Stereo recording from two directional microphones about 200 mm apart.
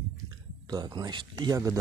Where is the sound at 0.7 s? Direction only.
20° right (ahead or behind).